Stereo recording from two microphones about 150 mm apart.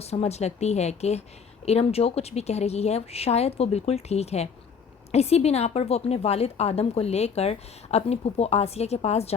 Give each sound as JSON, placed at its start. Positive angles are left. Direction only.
{"t": 0.0, "sound": "a woman's voice", "side_deg": 45}